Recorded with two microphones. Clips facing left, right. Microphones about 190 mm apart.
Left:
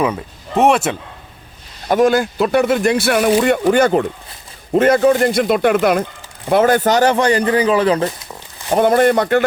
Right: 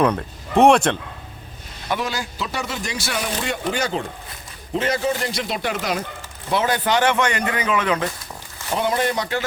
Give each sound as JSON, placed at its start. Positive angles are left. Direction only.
{"t": 0.0, "sound": "speech", "side_deg": 5}
{"t": 1.9, "sound": "speech", "side_deg": 50}
{"t": 8.7, "sound": "speech", "side_deg": 50}